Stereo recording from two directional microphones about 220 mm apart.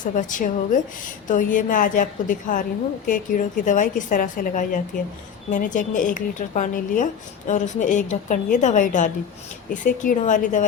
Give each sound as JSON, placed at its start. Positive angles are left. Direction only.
{"t": 0.0, "sound": "a woman's voice", "side_deg": 35}